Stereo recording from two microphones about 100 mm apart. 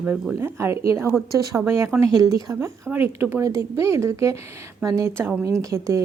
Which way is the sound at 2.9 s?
20° right (ahead or behind).